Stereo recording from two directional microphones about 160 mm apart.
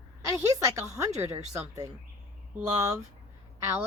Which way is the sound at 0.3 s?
20° right (ahead or behind).